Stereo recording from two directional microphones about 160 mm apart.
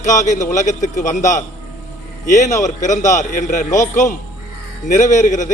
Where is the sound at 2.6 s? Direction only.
50° left (ahead or behind).